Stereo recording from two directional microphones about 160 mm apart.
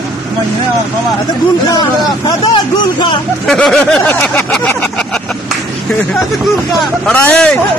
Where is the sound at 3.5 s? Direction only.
5° left (ahead or behind).